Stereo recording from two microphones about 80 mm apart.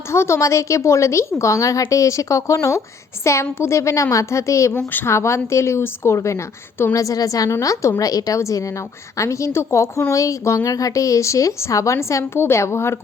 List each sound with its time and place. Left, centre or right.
0.1 s a woman's voice: left
6.9 s a woman's voice: left